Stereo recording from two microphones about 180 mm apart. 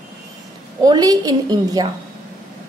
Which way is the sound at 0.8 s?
20° right (ahead or behind).